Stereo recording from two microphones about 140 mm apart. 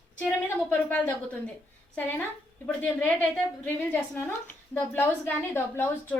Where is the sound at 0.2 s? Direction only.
15° left (ahead or behind).